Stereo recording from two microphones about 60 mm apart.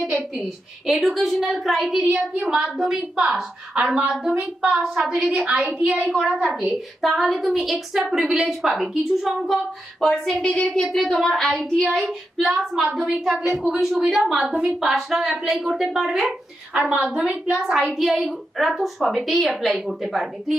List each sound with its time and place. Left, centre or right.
0.9 s a woman's voice: centre
5.5 s a woman's voice: centre
6.1 s a woman's voice: centre
7.0 s a woman's voice: centre
11.3 s child singing: centre
11.9 s a woman's voice: centre; by 17.7 s right
17.7 s a woman's voice: centre